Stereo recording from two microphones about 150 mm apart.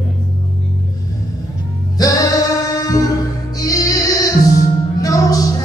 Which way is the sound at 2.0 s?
25° left (ahead or behind).